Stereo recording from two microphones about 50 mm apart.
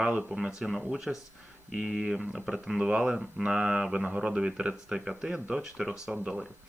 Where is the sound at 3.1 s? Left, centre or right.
Centre.